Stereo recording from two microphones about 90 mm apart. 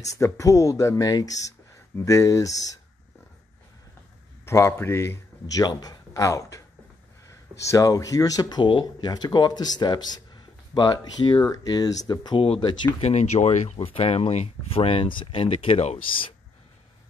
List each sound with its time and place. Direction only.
0.2 s speech: 35° left (ahead or behind)
4.5 s speech: 30° left (ahead or behind)
5.7 s speech: 45° left (ahead or behind)
8.6 s speech: 65° left (ahead or behind)
9.1 s speech: 50° left (ahead or behind)
12.4 s speech: 75° left (ahead or behind); by 12.9 s 60° left (ahead or behind)
13.4 s speech: 70° left (ahead or behind)
13.7 s speech: 90° left